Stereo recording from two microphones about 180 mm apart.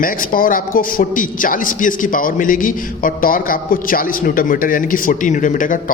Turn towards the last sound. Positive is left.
turn(degrees=45)  # may be behind; listen again after turning